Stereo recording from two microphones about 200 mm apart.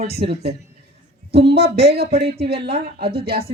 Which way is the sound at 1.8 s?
55° right (ahead or behind).